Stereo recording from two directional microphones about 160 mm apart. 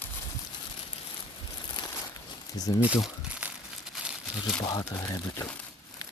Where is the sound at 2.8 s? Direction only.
5° right (ahead or behind).